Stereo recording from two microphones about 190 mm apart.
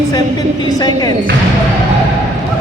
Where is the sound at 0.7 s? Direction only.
20° left (ahead or behind).